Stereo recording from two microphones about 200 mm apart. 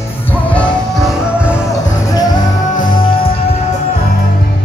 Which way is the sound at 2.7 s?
40° left (ahead or behind).